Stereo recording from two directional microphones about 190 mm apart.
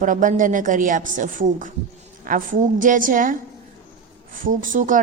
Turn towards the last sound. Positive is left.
turn(degrees=-45)  # may be behind; listen again after turning